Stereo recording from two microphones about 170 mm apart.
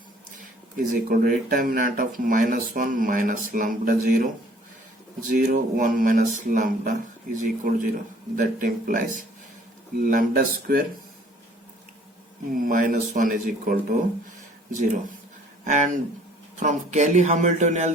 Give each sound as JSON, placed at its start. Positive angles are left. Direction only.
{"t": 0.8, "sound": "speech", "side_deg": -50}
{"t": 5.3, "sound": "speech", "side_deg": -55}
{"t": 12.5, "sound": "speech", "side_deg": -55}
{"t": 15.6, "sound": "speech", "side_deg": -45}